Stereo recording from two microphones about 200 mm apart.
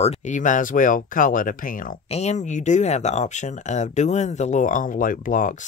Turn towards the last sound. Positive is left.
turn(degrees=40)  # may be behind; listen again after turning